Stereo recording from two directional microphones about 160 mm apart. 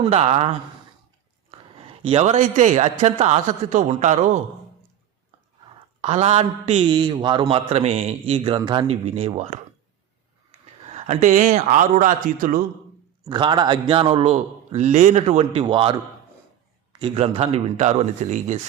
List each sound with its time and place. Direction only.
0.1 s a man's voice: 40° right (ahead or behind)
6.0 s a man's voice: 45° right (ahead or behind); by 8.9 s 25° right (ahead or behind)
8.9 s a man's voice: 40° right (ahead or behind)
10.8 s speech: 45° right (ahead or behind)
13.2 s a man's voice: 30° right (ahead or behind)
17.0 s speech: 35° right (ahead or behind)